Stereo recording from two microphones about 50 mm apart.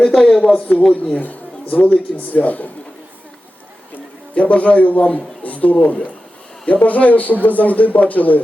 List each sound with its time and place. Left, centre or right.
0.0 s speech: centre
3.9 s a sound: left
5.8 s speech: left